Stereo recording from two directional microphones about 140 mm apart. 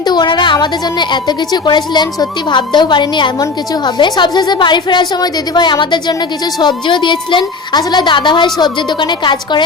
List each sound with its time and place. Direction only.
0.0 s a woman's voice: 30° left (ahead or behind)